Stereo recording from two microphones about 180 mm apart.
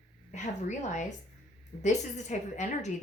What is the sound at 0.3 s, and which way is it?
A woman's voice, 40° left (ahead or behind).